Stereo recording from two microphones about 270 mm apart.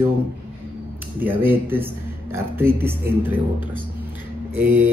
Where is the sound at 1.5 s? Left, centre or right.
Centre.